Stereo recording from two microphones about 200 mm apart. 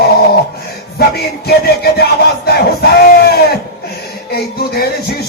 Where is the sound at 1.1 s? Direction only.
50° left (ahead or behind).